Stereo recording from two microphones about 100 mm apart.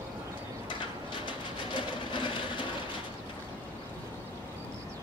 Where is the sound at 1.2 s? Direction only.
55° left (ahead or behind).